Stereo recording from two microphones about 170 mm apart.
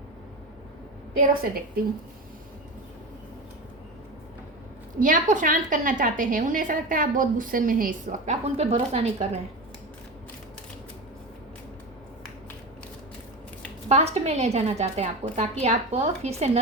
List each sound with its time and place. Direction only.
1.3 s a woman's voice: 60° right (ahead or behind)
4.9 s a woman's voice: 50° right (ahead or behind)
13.8 s a woman's voice: 40° right (ahead or behind)